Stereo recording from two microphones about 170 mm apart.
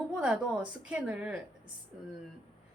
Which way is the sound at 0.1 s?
5° right (ahead or behind).